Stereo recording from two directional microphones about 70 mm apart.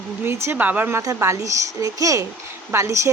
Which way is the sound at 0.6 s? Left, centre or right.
Right.